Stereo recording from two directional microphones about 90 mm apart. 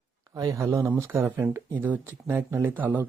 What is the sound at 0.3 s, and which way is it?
Speech, 40° right (ahead or behind).